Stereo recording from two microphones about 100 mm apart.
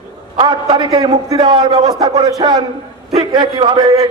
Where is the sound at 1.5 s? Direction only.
50° right (ahead or behind).